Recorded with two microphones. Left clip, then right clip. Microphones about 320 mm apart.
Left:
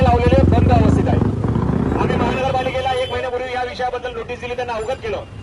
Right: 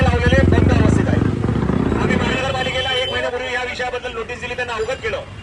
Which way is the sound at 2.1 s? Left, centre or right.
Left.